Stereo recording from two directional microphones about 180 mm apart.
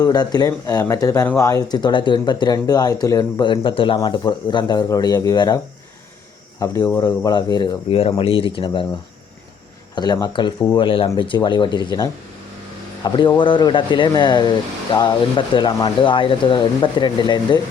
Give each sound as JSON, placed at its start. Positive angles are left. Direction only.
{"t": 0.0, "sound": "speech", "side_deg": 20}
{"t": 6.6, "sound": "speech", "side_deg": 20}
{"t": 9.9, "sound": "speech", "side_deg": 20}